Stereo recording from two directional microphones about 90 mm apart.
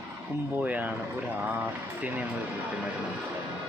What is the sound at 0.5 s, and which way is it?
Speech, 20° right (ahead or behind).